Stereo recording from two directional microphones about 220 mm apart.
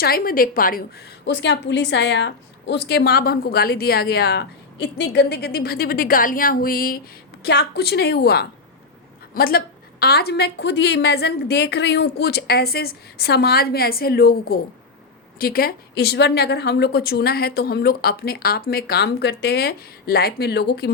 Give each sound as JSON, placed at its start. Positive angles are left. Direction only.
{"t": 0.0, "sound": "a woman's voice", "side_deg": 40}